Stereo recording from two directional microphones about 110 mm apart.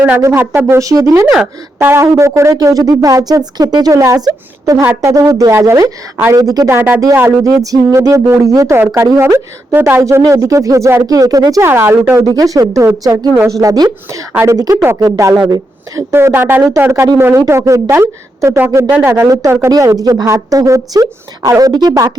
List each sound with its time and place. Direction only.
0.2 s speech: 20° right (ahead or behind)
0.8 s speech: 30° right (ahead or behind)
6.7 s speech: 15° right (ahead or behind)
7.4 s speech: 30° right (ahead or behind)
11.6 s speech: 20° right (ahead or behind)
16.1 s speech: 20° right (ahead or behind); by 22.2 s 35° right (ahead or behind)